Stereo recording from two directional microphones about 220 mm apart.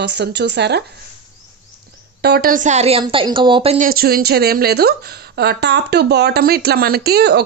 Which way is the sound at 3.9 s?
45° right (ahead or behind).